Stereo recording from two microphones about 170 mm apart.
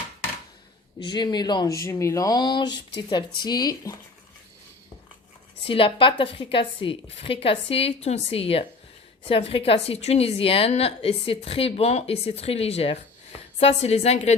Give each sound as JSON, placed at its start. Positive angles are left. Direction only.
{"t": 0.9, "sound": "speech", "side_deg": 25}
{"t": 5.6, "sound": "a woman's voice", "side_deg": 30}